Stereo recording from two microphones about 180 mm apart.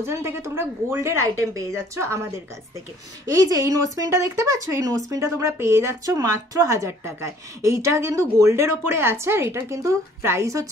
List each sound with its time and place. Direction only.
0.0 s speech: 15° right (ahead or behind)
3.3 s speech: 20° right (ahead or behind)